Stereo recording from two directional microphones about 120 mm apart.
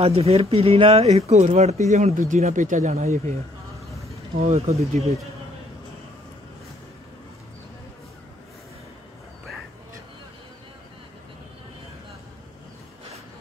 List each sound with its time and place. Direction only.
0.0 s speech: 55° right (ahead or behind)
4.5 s speech: 60° right (ahead or behind)